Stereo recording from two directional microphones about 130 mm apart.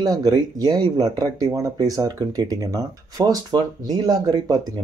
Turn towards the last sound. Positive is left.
turn(degrees=-30)  # may be behind; listen again after turning